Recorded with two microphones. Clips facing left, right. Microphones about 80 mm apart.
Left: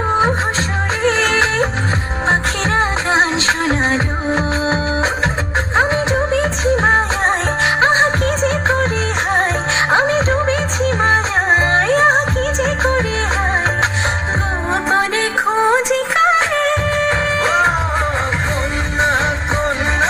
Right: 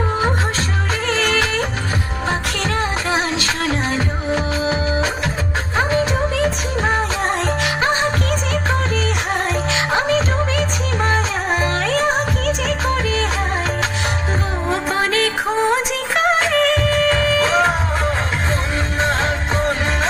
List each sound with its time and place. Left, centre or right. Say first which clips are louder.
1.0 s music: left 4 dB; left
9.9 s music: left 4 dB; left
14.7 s music: left 3 dB; left
16.4 s music: even; left